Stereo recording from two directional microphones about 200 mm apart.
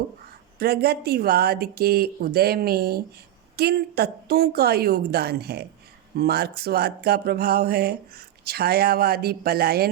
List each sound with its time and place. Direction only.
0.6 s speech: 55° right (ahead or behind)